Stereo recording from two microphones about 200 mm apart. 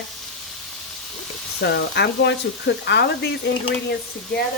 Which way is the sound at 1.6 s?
60° left (ahead or behind).